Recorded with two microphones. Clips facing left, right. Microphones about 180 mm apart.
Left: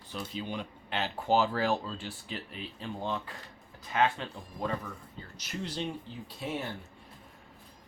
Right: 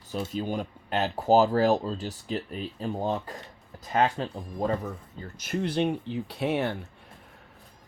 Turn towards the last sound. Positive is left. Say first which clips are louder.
# right 9 dB
turn(degrees=-70)  # may be behind; listen again after turning